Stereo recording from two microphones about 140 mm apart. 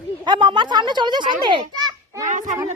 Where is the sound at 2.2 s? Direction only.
65° right (ahead or behind).